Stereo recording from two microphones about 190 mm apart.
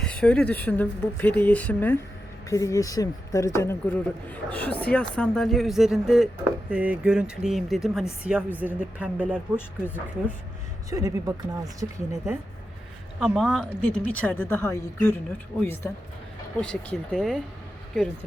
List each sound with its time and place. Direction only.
0.0 s speech: 5° left (ahead or behind)
9.6 s speech: 10° left (ahead or behind)
10.8 s speech: 20° right (ahead or behind)
13.1 s speech: centre (ahead or behind)